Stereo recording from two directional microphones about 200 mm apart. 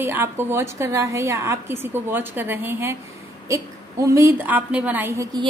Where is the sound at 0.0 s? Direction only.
10° right (ahead or behind).